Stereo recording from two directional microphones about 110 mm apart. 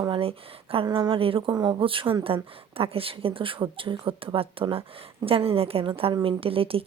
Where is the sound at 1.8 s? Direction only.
55° right (ahead or behind).